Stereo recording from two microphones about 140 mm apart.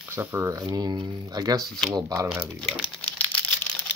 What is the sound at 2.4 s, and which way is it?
Crumpling, 10° left (ahead or behind).